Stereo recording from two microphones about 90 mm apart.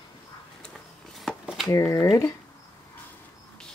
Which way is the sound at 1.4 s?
Centre (ahead or behind).